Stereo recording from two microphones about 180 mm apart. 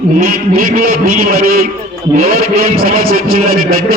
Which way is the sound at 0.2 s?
50° right (ahead or behind).